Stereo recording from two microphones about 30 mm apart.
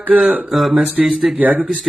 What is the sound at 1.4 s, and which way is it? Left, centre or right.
Speech, right.